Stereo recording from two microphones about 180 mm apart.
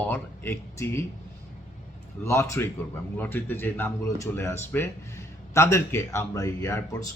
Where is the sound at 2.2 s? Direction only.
15° left (ahead or behind).